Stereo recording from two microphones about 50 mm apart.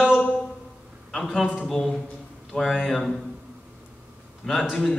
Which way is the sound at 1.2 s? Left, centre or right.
Centre.